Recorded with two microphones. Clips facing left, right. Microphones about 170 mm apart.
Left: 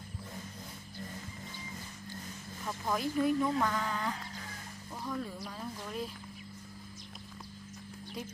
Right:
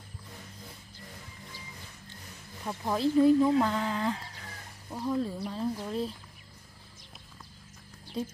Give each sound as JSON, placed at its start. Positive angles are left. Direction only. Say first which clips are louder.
{"t": 2.6, "sound": "speech", "louder": "right 5 dB", "side_deg": -25}
{"t": 8.2, "sound": "speech", "louder": "right 8 dB", "side_deg": -25}